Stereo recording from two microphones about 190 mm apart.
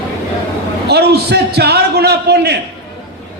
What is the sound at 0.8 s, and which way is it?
A man's voice, 60° right (ahead or behind).